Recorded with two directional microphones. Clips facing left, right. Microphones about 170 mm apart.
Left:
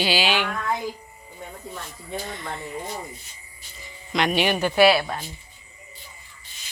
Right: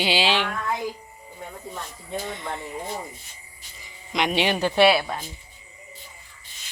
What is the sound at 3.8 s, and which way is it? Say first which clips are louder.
Speech: left 2 dB; 15° right (ahead or behind).